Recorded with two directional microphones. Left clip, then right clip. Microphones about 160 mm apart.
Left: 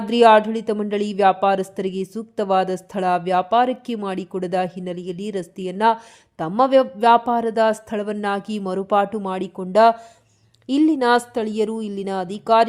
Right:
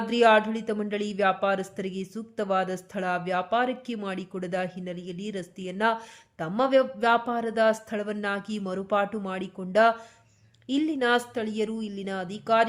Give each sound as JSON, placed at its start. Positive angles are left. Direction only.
{"t": 0.0, "sound": "a woman's voice", "side_deg": 35}